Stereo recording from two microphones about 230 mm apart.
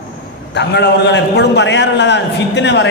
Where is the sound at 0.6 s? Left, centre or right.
Left.